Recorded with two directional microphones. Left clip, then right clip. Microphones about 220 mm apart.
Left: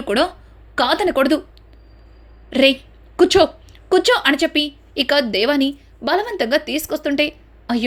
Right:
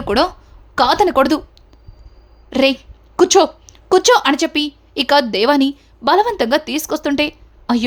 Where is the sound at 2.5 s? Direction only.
15° right (ahead or behind).